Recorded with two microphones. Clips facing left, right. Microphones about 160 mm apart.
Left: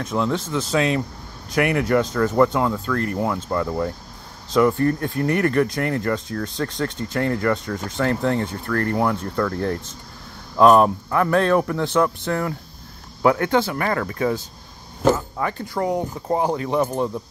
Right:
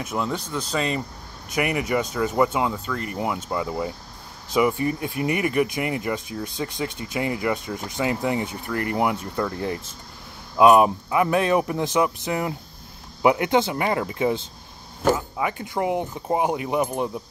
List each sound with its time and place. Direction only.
0.0 s speech: 5° right (ahead or behind)